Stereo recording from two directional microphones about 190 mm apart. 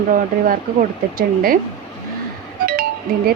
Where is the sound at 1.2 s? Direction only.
50° right (ahead or behind).